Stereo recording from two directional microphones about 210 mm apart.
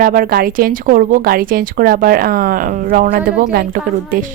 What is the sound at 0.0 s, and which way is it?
Speech, 40° right (ahead or behind).